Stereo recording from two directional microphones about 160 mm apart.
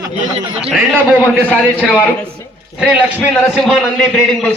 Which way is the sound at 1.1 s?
10° right (ahead or behind).